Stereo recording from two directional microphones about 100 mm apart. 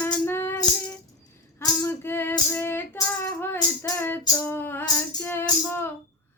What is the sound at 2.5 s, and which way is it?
Music, 20° left (ahead or behind).